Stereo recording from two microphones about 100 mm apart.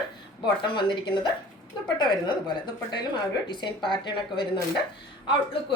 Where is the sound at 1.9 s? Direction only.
50° left (ahead or behind).